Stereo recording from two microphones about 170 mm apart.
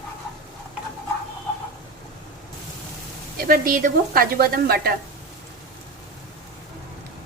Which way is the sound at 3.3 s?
60° right (ahead or behind).